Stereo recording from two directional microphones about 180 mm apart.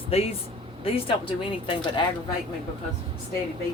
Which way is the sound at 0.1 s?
35° left (ahead or behind).